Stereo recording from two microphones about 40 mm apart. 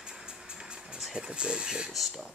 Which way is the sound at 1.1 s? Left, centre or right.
Right.